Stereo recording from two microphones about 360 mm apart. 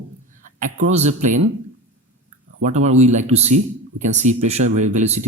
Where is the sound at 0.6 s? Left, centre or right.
Centre.